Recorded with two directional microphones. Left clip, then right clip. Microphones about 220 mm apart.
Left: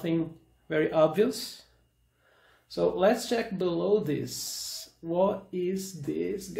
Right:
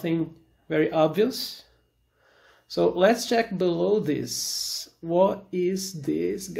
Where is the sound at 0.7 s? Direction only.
20° right (ahead or behind).